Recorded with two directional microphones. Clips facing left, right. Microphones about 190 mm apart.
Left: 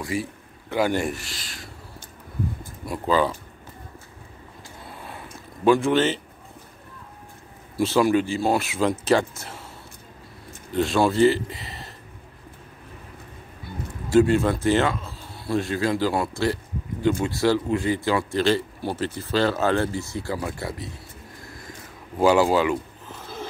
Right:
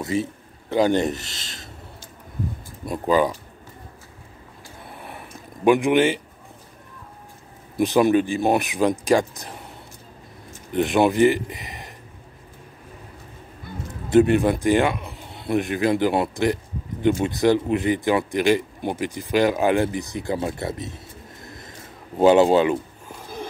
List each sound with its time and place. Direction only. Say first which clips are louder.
0.0 s a man's voice: right 4 dB; 25° right (ahead or behind)
2.8 s speech: right 2 dB; 20° right (ahead or behind)
5.6 s speech: right 2 dB; 15° right (ahead or behind)
7.7 s speech: right 2 dB; 20° right (ahead or behind)
10.7 s speech: right 2 dB; 20° right (ahead or behind)
14.0 s a man's voice: right 2 dB; 20° right (ahead or behind)
23.0 s a sound: right 1 dB; 15° right (ahead or behind)